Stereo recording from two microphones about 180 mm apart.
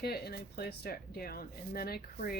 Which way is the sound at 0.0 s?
60° left (ahead or behind).